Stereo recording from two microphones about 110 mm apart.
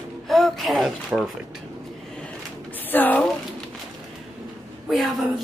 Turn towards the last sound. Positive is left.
turn(degrees=0)  # may be behind; listen again after turning